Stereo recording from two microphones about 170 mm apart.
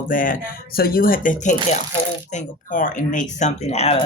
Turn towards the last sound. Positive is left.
turn(degrees=35)  # may be behind; listen again after turning